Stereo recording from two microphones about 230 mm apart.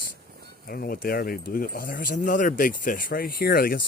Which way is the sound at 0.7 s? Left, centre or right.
Left.